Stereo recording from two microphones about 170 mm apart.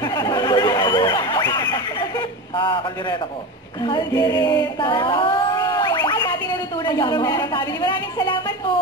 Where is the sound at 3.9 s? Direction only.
25° left (ahead or behind).